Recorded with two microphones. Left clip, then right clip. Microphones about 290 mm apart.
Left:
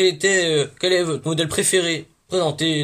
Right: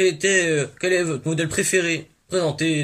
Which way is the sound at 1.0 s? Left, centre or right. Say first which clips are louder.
Left 2 dB; left.